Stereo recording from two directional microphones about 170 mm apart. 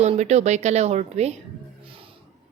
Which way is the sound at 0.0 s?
40° right (ahead or behind).